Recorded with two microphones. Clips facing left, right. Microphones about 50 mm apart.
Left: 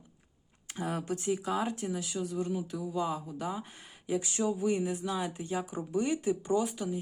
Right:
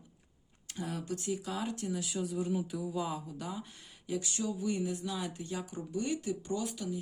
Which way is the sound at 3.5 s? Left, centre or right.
Left.